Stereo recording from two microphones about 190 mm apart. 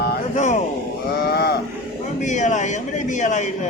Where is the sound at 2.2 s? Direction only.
40° left (ahead or behind).